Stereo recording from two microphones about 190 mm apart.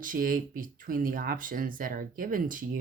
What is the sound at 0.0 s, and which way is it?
Speech, 45° right (ahead or behind).